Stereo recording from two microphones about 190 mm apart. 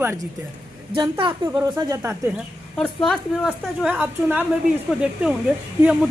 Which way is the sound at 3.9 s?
10° right (ahead or behind).